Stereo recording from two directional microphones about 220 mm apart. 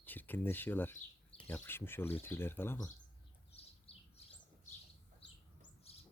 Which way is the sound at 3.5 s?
25° left (ahead or behind).